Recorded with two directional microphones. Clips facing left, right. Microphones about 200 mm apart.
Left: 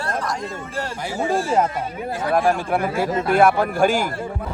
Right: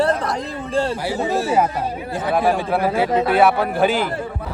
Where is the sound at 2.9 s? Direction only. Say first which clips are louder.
Right 1 dB; 50° left (ahead or behind).